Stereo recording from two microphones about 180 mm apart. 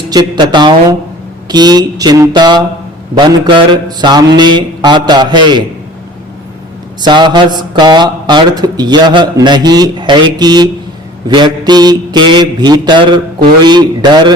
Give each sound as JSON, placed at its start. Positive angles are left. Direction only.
{"t": 0.1, "sound": "speech", "side_deg": -20}
{"t": 7.0, "sound": "speech", "side_deg": -25}